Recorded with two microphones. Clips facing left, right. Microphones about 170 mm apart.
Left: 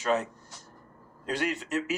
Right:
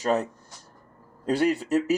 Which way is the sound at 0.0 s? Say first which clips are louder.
Right 3 dB; 35° right (ahead or behind).